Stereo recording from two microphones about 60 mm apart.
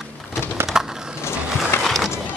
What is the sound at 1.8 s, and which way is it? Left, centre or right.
Skateboard, centre.